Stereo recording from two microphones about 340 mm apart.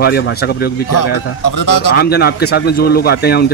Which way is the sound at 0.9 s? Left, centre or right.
Left.